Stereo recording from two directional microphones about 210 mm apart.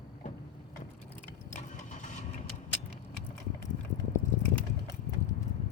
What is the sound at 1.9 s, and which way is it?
Vehicle, 35° left (ahead or behind).